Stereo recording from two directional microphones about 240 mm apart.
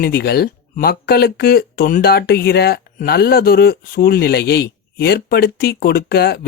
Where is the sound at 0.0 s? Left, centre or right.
Left.